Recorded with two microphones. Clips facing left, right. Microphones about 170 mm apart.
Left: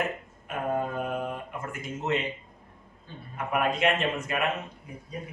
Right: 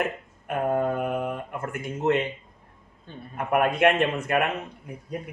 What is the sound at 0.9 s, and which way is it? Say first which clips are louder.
Mantra: right 4 dB; 60° right (ahead or behind).